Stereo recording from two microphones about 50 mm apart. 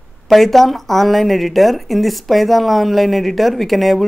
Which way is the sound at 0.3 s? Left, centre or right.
Centre.